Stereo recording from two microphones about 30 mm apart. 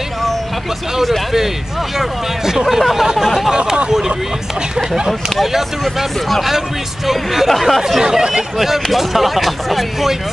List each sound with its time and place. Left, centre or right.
2.0 s speech: centre
3.5 s speech: right
6.2 s speech: centre
8.0 s speech: right
8.5 s speech: centre